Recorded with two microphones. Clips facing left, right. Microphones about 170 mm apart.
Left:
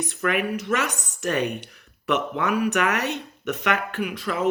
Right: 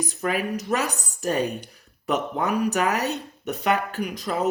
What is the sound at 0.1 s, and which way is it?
Speech, 65° left (ahead or behind).